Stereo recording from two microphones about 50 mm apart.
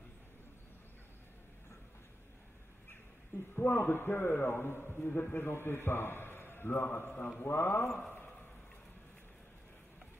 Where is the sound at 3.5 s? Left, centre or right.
Left.